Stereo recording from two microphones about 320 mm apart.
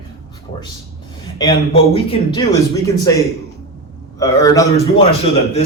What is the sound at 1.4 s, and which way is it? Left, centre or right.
A man's voice, centre.